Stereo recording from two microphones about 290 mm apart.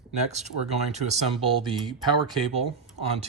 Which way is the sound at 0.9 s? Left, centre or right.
Right.